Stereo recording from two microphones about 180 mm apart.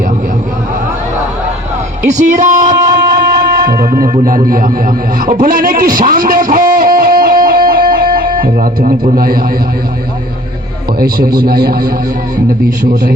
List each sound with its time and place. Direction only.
2.0 s speech: 45° right (ahead or behind)
3.2 s music: 55° right (ahead or behind)
4.4 s speech: 50° right (ahead or behind)
5.2 s a sound: 50° right (ahead or behind)
8.4 s speech: 50° right (ahead or behind)
11.0 s a man's voice: 55° right (ahead or behind)